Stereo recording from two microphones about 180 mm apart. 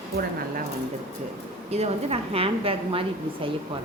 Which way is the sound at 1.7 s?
35° right (ahead or behind).